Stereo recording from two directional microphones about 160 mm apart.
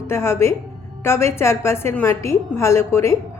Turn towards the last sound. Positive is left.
turn(degrees=15)  # may be behind; listen again after turning